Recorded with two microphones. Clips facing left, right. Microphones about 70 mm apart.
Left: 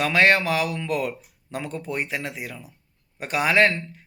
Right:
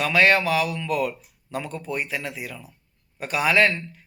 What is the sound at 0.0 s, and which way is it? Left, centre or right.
A man's voice, left.